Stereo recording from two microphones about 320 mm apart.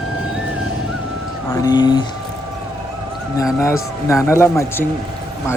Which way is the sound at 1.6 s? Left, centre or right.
Centre.